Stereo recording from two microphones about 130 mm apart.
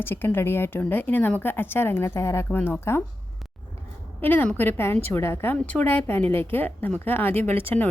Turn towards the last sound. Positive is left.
turn(degrees=15)  # may be behind; listen again after turning